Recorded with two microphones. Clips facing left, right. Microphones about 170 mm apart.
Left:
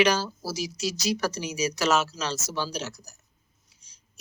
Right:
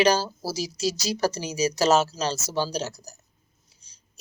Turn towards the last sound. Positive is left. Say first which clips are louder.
# right 4 dB
turn(degrees=-35)  # may be behind; listen again after turning